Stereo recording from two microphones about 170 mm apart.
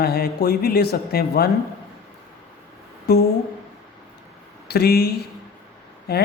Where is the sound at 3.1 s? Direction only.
65° left (ahead or behind).